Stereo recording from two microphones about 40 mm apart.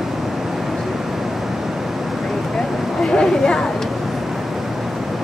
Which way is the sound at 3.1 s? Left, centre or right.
Centre.